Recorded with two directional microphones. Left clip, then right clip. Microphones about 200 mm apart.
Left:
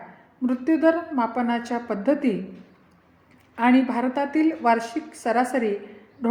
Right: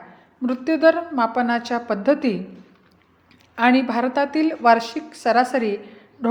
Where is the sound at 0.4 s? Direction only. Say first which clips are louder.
Right 4 dB; 20° right (ahead or behind).